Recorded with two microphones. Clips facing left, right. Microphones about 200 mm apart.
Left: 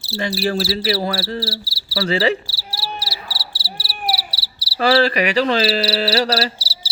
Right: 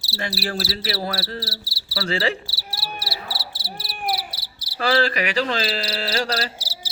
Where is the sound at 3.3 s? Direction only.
50° right (ahead or behind).